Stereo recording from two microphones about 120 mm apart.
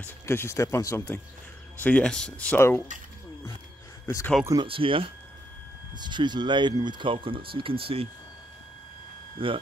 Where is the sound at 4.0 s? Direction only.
20° left (ahead or behind).